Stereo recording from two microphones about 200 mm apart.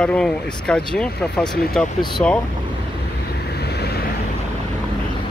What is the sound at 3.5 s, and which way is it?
Vehicle, 55° left (ahead or behind).